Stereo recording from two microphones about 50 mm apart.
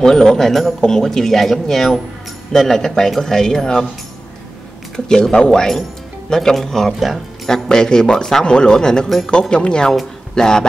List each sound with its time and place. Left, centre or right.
0.0 s a man's voice: centre
4.9 s a man's voice: centre
7.5 s a man's voice: centre